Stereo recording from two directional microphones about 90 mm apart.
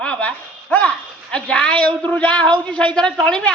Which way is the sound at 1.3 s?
10° left (ahead or behind).